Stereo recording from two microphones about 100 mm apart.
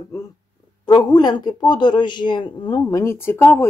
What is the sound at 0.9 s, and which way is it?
A man's voice, 45° left (ahead or behind).